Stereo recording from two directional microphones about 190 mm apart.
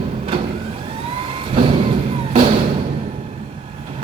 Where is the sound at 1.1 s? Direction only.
30° right (ahead or behind).